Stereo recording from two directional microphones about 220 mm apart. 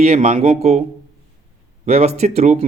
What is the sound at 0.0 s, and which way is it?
A man's voice, 30° right (ahead or behind).